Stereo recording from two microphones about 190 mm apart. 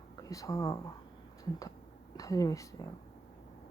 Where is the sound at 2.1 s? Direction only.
20° left (ahead or behind).